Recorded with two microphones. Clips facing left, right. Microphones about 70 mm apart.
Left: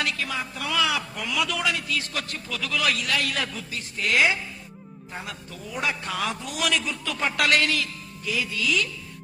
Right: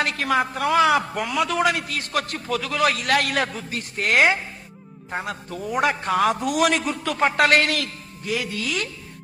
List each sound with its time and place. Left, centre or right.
0.0 s a man's voice: right
0.3 s a man's voice: right
1.3 s a man's voice: right
3.1 s a man's voice: right
7.7 s a man's voice: right